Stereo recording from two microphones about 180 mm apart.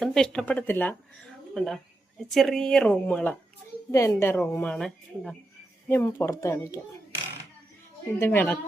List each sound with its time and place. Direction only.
0.0 s a woman's voice: centre (ahead or behind)
5.9 s a woman's voice: 15° left (ahead or behind)
8.2 s a woman's voice: 10° left (ahead or behind)